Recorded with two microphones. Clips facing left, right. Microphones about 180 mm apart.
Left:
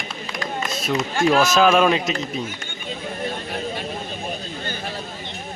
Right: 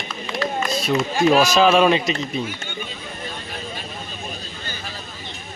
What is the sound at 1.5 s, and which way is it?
Speech, centre (ahead or behind).